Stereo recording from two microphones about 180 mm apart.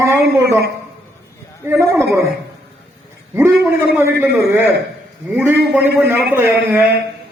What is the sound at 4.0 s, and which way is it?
A man's voice, 10° right (ahead or behind).